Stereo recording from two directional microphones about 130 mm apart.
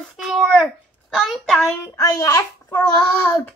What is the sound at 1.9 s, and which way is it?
Speech, 30° left (ahead or behind).